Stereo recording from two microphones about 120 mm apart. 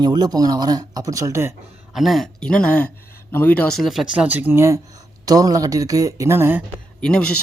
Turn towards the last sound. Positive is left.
turn(degrees=5)  # may be behind; listen again after turning